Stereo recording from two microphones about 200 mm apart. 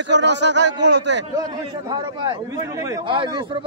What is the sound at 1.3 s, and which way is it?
A man's voice, 20° right (ahead or behind).